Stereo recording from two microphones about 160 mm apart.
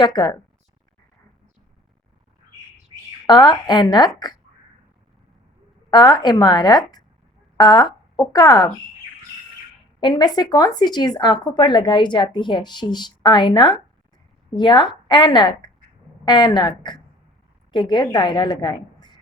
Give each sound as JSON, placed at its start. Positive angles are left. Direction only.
{"t": 0.0, "sound": "speech", "side_deg": 25}
{"t": 3.2, "sound": "speech", "side_deg": 25}
{"t": 5.9, "sound": "a woman's voice", "side_deg": 25}
{"t": 10.0, "sound": "a woman's voice", "side_deg": 25}